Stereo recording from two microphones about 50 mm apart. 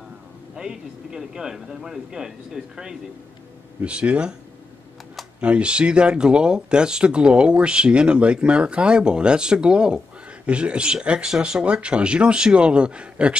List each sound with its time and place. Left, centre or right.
0.6 s speech: centre
3.8 s speech: right
5.4 s speech: right